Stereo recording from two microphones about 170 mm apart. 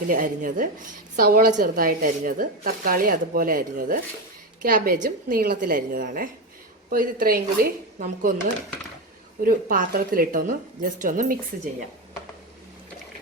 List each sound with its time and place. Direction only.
0.1 s a woman's voice: 50° right (ahead or behind)
9.4 s a woman's voice: 55° right (ahead or behind)